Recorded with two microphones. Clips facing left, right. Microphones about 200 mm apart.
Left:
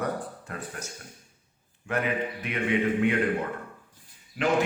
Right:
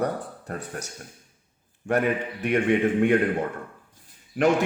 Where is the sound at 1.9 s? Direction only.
45° right (ahead or behind).